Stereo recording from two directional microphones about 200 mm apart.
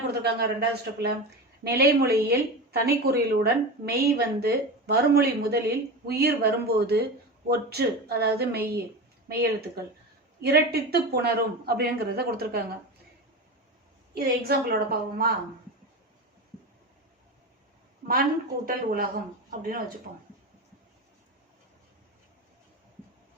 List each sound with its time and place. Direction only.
0.1 s speech: 55° right (ahead or behind)
14.1 s speech: 50° right (ahead or behind)
18.1 s speech: 45° right (ahead or behind)